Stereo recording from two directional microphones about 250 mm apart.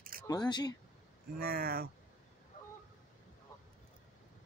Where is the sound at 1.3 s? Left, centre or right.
Right.